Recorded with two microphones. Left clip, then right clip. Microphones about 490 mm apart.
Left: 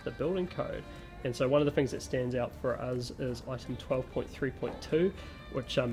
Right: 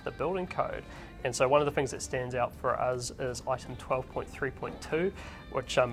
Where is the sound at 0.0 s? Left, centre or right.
Right.